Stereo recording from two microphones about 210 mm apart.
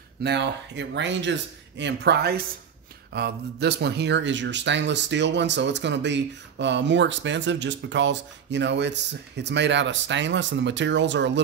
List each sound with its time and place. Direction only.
0.2 s speech: 55° right (ahead or behind)